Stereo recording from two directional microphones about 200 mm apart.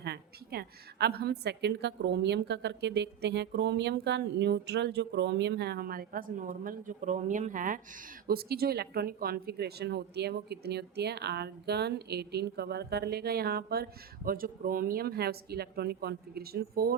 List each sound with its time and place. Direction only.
0.0 s a woman's voice: 55° right (ahead or behind)